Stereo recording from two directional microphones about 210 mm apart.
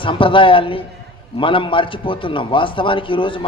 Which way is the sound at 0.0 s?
25° left (ahead or behind).